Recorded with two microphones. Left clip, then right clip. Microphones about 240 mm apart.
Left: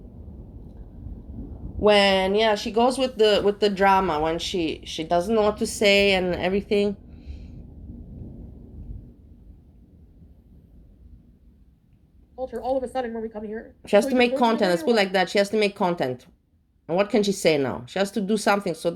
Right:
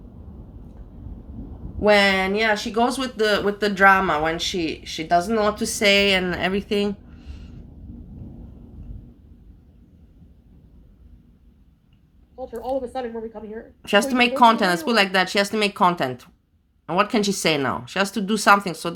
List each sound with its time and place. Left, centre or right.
1.9 s speech: centre
2.2 s speech: right
2.5 s speech: centre
4.9 s speech: right
5.2 s speech: centre
6.3 s a sound: right
12.6 s a woman's voice: left
13.8 s speech: right